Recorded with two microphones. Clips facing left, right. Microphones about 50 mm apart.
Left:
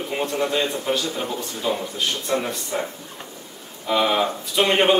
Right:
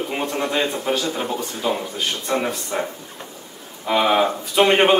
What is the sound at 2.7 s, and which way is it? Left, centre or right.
Speech, right.